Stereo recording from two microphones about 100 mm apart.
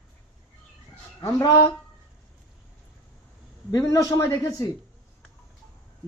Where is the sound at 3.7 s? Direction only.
35° left (ahead or behind).